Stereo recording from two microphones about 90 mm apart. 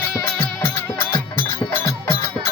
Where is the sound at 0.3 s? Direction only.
25° left (ahead or behind).